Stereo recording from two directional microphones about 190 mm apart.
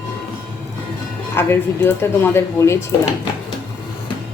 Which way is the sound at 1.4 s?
15° left (ahead or behind).